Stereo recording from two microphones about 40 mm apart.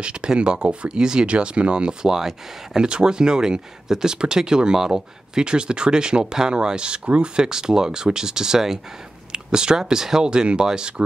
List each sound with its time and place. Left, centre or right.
0.0 s speech: right
1.2 s speech: right